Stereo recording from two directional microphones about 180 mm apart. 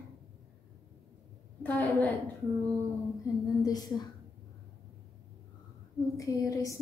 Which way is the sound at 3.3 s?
20° left (ahead or behind).